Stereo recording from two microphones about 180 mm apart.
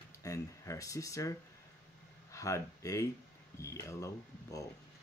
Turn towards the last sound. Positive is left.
turn(degrees=15)  # may be behind; listen again after turning